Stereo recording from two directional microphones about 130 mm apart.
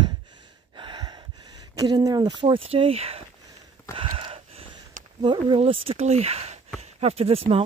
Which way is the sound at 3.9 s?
45° right (ahead or behind).